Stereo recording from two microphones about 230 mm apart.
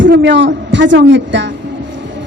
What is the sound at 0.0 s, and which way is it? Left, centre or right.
A man's voice, right.